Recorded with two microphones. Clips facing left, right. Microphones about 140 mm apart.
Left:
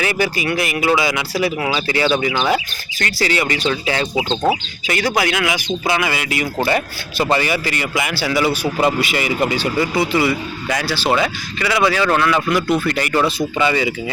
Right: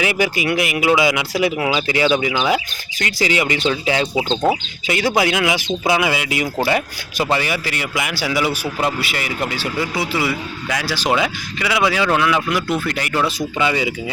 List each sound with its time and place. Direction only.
0.0 s a man's voice: 15° right (ahead or behind)
5.8 s a man's voice: 10° right (ahead or behind)